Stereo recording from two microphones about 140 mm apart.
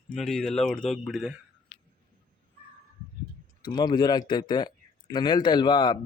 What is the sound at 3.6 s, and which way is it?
Speech, 30° left (ahead or behind).